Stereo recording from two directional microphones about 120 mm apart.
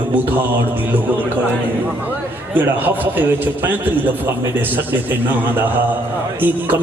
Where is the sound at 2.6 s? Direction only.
15° right (ahead or behind).